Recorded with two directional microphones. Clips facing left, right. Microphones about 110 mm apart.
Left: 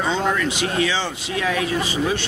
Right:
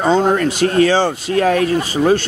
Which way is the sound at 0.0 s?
45° right (ahead or behind).